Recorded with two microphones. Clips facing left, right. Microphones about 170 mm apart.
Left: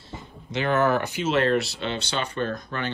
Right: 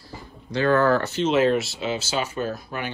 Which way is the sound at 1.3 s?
Centre (ahead or behind).